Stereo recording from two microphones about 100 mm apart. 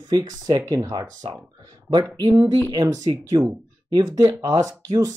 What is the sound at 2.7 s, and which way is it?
Speech, 40° right (ahead or behind).